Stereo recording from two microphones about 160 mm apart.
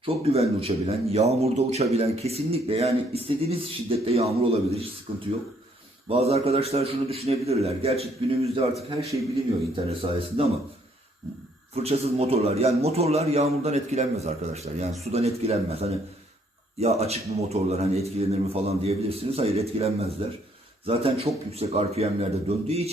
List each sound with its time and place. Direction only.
0.0 s speech: 40° right (ahead or behind)
6.1 s speech: 40° right (ahead or behind)
9.7 s speech: 35° right (ahead or behind)
11.7 s speech: 40° right (ahead or behind)